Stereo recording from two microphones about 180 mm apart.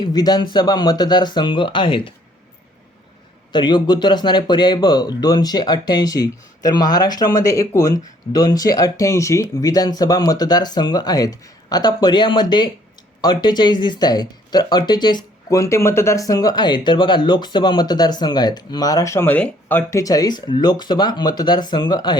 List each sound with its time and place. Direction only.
0.0 s speech: 20° left (ahead or behind)
3.5 s speech: 25° left (ahead or behind)